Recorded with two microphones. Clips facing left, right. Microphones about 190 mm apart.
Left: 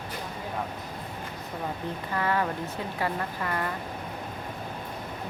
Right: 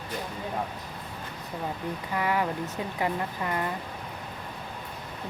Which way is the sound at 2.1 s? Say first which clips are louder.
Even; 15° right (ahead or behind).